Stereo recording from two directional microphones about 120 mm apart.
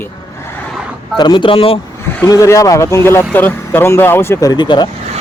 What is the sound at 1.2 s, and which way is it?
Speech, 40° left (ahead or behind).